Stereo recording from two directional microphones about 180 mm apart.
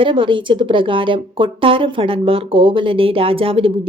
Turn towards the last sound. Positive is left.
turn(degrees=-30)  # may be behind; listen again after turning